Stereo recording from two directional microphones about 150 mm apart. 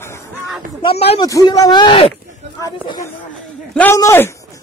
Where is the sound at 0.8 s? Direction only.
40° left (ahead or behind).